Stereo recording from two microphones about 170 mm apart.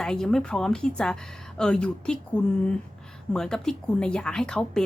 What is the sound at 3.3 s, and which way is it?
Speech, 5° left (ahead or behind).